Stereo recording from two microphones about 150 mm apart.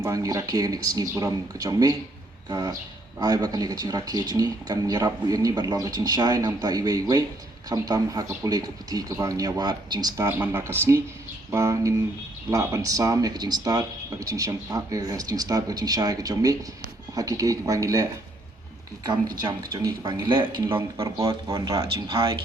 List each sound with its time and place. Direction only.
0.0 s speech: 20° right (ahead or behind)
19.4 s speech: 25° right (ahead or behind)
20.7 s speech: 20° right (ahead or behind)